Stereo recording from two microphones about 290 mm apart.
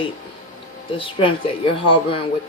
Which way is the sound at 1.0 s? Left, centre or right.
Centre.